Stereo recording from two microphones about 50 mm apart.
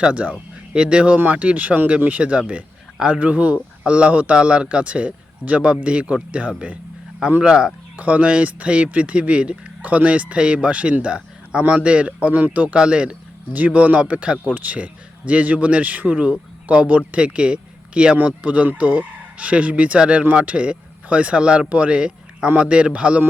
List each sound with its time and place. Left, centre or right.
0.0 s speech: right
0.7 s speech: centre
7.9 s speech: right
12.3 s a man's voice: right
12.7 s speech: right